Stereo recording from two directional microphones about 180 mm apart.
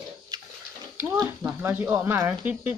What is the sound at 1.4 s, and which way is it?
Speech, 10° right (ahead or behind).